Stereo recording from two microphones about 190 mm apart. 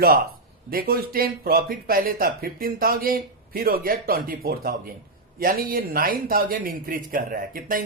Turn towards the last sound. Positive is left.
turn(degrees=-45)  # may be behind; listen again after turning